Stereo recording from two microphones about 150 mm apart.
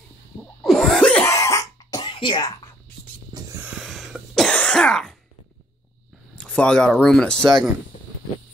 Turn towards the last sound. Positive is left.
turn(degrees=5)  # may be behind; listen again after turning